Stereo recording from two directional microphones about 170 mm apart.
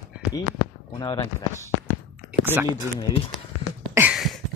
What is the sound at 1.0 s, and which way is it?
Speech, 20° left (ahead or behind).